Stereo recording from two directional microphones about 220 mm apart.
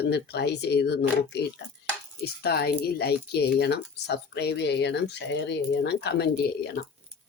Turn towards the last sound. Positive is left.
turn(degrees=45)  # may be behind; listen again after turning